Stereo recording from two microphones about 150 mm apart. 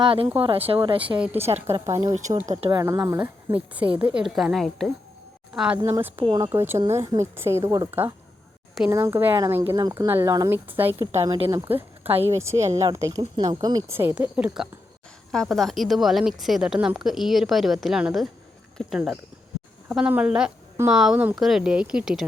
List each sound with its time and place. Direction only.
0.0 s speech: 35° right (ahead or behind)
1.2 s speech: 10° right (ahead or behind)
1.5 s a woman's voice: 45° right (ahead or behind)
1.8 s speech: 20° right (ahead or behind)
3.5 s speech: 10° right (ahead or behind)
5.5 s speech: 10° right (ahead or behind)
9.8 s a woman's voice: 25° right (ahead or behind); by 22.3 s 5° right (ahead or behind)